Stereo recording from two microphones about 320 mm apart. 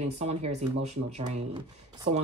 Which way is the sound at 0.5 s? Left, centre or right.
Right.